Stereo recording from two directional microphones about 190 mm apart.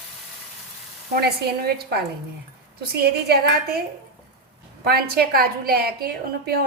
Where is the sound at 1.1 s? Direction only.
55° right (ahead or behind).